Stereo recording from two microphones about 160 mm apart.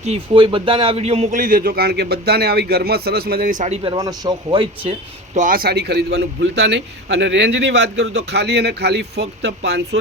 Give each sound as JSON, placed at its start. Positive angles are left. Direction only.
{"t": 0.3, "sound": "a man's voice", "side_deg": -30}
{"t": 3.9, "sound": "speech", "side_deg": -25}
{"t": 5.3, "sound": "a man's voice", "side_deg": -55}